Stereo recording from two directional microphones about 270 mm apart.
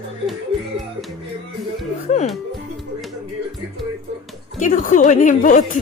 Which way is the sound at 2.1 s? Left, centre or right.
Left.